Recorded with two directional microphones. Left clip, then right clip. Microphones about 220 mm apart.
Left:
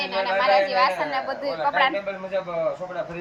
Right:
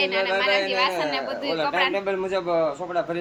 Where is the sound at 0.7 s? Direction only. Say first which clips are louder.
Left 2 dB; 25° right (ahead or behind).